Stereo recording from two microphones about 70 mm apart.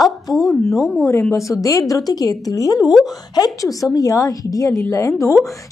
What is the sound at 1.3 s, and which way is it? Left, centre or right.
A woman's voice, left.